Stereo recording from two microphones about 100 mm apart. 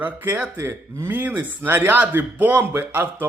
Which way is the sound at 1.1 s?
15° right (ahead or behind).